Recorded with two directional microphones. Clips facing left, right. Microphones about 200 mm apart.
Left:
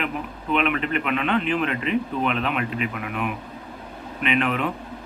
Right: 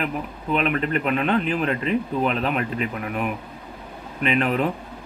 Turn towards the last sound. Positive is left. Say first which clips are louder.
# right 2 dB
turn(degrees=-40)  # may be behind; listen again after turning